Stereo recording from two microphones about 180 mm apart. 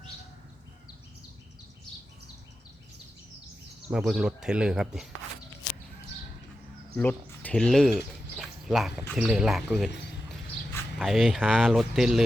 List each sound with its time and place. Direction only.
3.8 s speech: 5° right (ahead or behind)
5.6 s a sound: 20° left (ahead or behind)
6.9 s speech: 10° left (ahead or behind)
10.9 s speech: centre (ahead or behind)